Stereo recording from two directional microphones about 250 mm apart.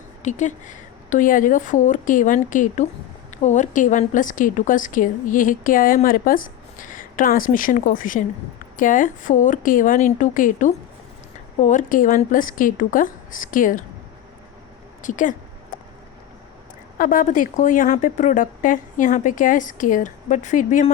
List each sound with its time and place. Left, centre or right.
0.2 s a woman's voice: left
15.0 s a sound: left
17.0 s a woman's voice: left